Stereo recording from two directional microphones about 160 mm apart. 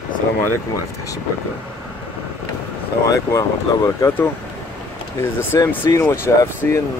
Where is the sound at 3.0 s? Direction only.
20° left (ahead or behind).